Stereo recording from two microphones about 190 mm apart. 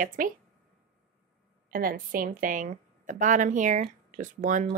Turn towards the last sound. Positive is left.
turn(degrees=-45)  # may be behind; listen again after turning